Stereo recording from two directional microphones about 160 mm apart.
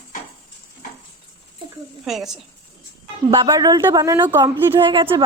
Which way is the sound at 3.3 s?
25° right (ahead or behind).